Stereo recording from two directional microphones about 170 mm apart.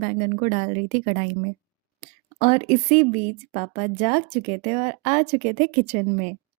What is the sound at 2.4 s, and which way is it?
Speech, 45° left (ahead or behind).